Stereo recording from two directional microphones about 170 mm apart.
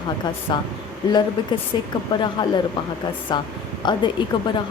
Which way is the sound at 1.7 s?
25° left (ahead or behind).